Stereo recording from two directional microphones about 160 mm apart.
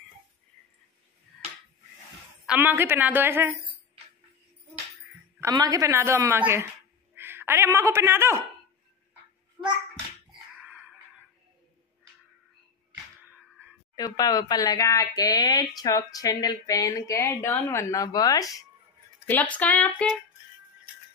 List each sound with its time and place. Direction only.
2.4 s a woman's voice: 10° right (ahead or behind)
5.4 s a woman's voice: 20° right (ahead or behind)
13.2 s a sound: 10° right (ahead or behind)
13.9 s speech: 25° left (ahead or behind)
19.2 s speech: 10° left (ahead or behind)